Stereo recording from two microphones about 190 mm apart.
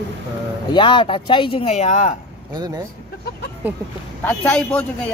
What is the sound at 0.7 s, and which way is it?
Speech, 25° left (ahead or behind).